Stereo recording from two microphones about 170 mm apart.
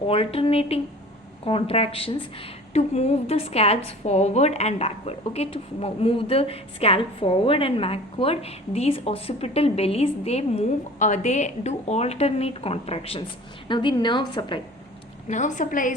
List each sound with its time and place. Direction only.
0.1 s a woman's voice: 35° left (ahead or behind)
15.3 s a woman's voice: 45° left (ahead or behind)